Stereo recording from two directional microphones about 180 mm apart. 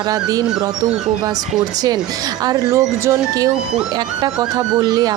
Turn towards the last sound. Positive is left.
turn(degrees=-20)  # may be behind; listen again after turning